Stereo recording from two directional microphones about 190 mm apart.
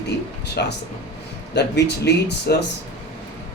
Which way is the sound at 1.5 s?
65° left (ahead or behind).